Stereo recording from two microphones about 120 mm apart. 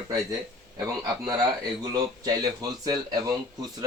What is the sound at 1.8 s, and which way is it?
Speech, 30° right (ahead or behind).